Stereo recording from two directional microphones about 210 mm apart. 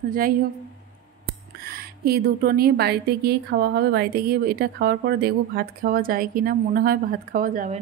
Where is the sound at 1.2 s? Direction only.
45° right (ahead or behind).